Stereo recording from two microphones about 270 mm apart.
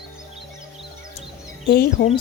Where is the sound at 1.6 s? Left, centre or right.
Left.